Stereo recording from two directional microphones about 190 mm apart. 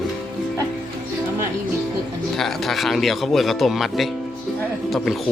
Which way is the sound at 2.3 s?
Centre (ahead or behind).